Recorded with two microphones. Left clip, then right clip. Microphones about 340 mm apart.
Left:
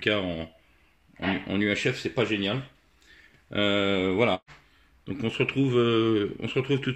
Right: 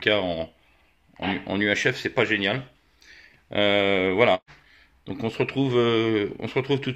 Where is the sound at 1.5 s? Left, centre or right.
Centre.